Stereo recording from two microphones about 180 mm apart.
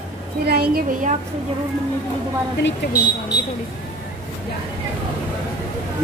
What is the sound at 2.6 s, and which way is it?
Speech, 80° left.